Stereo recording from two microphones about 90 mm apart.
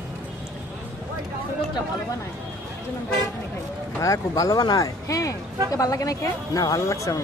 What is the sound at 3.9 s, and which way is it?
Speech, 35° left (ahead or behind).